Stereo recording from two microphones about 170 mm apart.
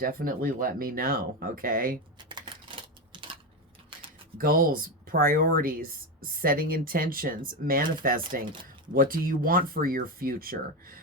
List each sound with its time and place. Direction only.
0.0 s speech: 60° right (ahead or behind)
2.1 s typewriter: 30° right (ahead or behind)
4.4 s speech: 55° right (ahead or behind)